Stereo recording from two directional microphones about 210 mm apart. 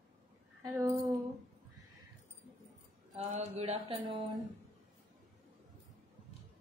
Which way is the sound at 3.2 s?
30° right (ahead or behind).